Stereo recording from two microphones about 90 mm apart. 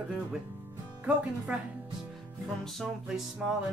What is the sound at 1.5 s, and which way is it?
Speech, 20° right (ahead or behind).